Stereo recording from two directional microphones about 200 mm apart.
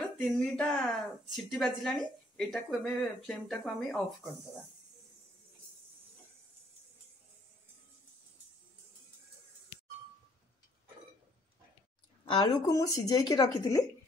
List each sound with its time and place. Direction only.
0.0 s a woman's voice: centre (ahead or behind)
12.3 s a woman's voice: 20° left (ahead or behind)